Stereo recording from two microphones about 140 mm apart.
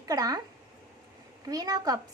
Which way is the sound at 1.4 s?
25° right (ahead or behind).